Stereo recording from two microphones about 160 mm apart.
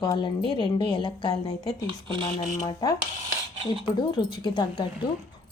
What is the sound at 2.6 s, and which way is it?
Speech, 25° left (ahead or behind).